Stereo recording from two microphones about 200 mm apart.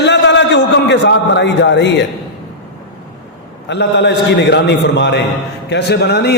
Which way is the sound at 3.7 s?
60° left (ahead or behind).